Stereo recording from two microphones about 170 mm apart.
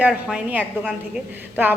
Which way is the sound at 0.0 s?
5° right (ahead or behind).